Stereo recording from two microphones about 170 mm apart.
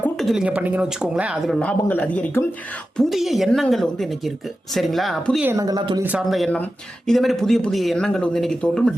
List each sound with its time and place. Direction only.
0.0 s speech: centre (ahead or behind)
5.5 s speech: 20° right (ahead or behind)
6.0 s speech: 10° right (ahead or behind)